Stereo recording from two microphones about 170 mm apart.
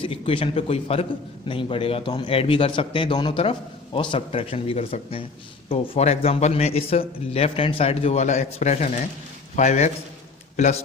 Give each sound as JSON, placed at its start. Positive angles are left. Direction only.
{"t": 0.0, "sound": "a man's voice", "side_deg": 30}